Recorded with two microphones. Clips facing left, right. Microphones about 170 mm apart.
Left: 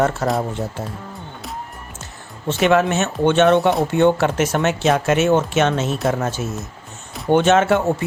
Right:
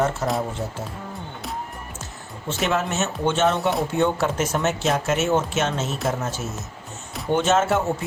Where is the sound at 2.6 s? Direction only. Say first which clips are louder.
Left 7 dB; 70° left (ahead or behind).